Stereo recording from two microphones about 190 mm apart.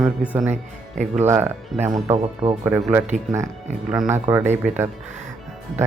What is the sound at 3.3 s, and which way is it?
Speech, 15° right (ahead or behind).